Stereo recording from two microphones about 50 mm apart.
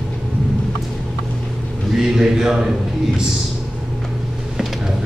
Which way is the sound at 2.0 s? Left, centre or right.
Centre.